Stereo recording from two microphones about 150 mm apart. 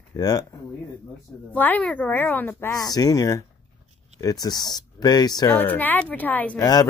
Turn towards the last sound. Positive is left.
turn(degrees=25)  # may be behind; listen again after turning